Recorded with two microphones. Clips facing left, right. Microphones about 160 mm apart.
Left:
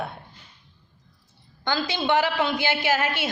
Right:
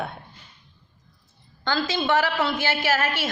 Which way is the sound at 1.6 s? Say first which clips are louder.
Right 1 dB; 15° left (ahead or behind).